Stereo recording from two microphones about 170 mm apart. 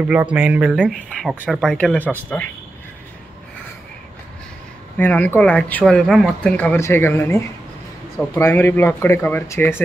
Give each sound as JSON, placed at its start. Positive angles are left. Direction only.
{"t": 0.1, "sound": "speech", "side_deg": -10}
{"t": 1.6, "sound": "speech", "side_deg": 5}
{"t": 4.9, "sound": "speech", "side_deg": 10}